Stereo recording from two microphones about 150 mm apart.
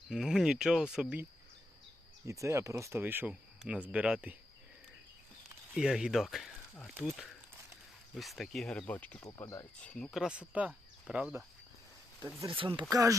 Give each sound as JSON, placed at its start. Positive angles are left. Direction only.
{"t": 0.1, "sound": "speech", "side_deg": 0}
{"t": 2.2, "sound": "speech", "side_deg": -20}
{"t": 5.7, "sound": "speech", "side_deg": -5}
{"t": 9.8, "sound": "speech", "side_deg": 5}
{"t": 12.5, "sound": "speech", "side_deg": -35}
{"t": 12.8, "sound": "speech", "side_deg": -20}